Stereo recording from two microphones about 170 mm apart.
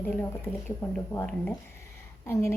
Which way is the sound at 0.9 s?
5° left (ahead or behind).